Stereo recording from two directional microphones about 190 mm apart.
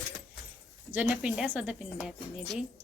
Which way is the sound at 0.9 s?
5° right (ahead or behind).